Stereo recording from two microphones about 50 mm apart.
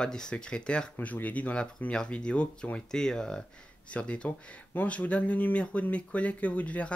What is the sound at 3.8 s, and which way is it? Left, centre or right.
Speech, left.